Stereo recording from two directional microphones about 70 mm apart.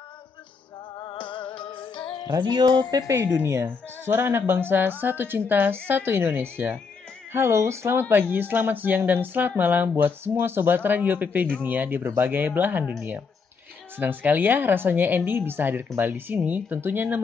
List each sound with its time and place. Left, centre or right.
2.3 s music: right
3.1 s speech: right
3.6 s speech: right
7.3 s speech: right
8.1 s speech: right
13.9 s speech: right